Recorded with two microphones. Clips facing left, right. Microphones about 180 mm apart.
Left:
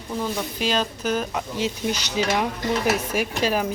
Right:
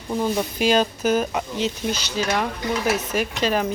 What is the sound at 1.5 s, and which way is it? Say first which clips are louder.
Speech: left 1 dB; 15° left (ahead or behind).